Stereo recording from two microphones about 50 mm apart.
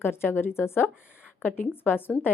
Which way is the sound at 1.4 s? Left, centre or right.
Left.